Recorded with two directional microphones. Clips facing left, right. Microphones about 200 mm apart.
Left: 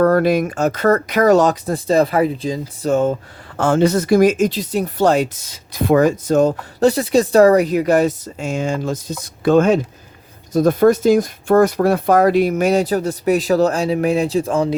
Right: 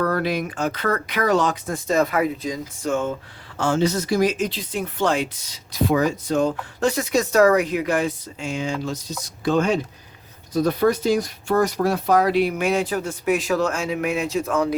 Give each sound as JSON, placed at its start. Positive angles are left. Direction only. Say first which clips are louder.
{"t": 0.0, "sound": "speech", "louder": "left 9 dB", "side_deg": 45}
{"t": 3.6, "sound": "speech", "louder": "left 6 dB", "side_deg": 55}